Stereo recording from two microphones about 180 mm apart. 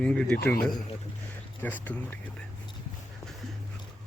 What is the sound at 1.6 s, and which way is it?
Speech, 10° left (ahead or behind).